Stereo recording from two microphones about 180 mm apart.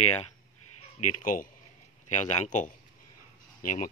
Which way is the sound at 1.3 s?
50° left (ahead or behind).